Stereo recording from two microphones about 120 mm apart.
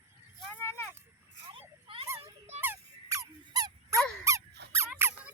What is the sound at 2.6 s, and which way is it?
Squeak, 20° right (ahead or behind).